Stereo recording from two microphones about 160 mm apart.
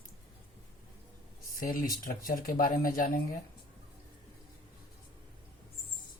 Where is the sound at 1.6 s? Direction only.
60° left (ahead or behind).